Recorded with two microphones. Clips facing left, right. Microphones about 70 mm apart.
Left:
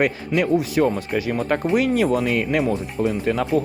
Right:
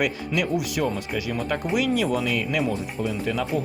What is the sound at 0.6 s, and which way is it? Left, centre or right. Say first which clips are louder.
Speech: left 6 dB; left.